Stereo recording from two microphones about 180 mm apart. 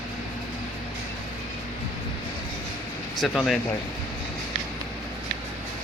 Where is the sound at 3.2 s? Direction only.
Centre (ahead or behind).